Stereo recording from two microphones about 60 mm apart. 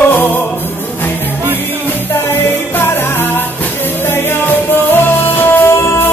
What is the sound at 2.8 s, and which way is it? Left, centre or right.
Music, left.